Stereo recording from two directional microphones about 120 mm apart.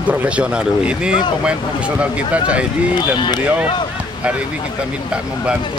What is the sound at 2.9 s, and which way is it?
Speech, 40° left (ahead or behind).